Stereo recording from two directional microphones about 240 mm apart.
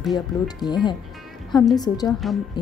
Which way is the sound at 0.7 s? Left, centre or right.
Centre.